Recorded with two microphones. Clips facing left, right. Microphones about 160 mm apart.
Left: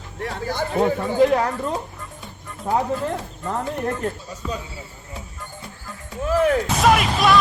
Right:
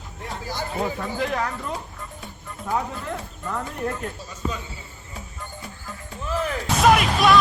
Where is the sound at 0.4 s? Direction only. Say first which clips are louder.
Left 7 dB; 55° left (ahead or behind).